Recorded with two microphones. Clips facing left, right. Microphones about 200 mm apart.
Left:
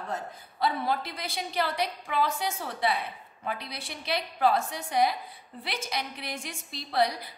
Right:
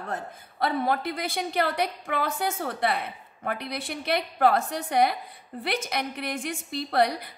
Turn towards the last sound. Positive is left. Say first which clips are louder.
# right 3 dB
turn(degrees=-55)  # may be behind; listen again after turning